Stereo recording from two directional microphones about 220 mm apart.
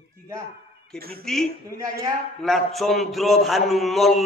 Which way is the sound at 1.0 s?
45° right (ahead or behind).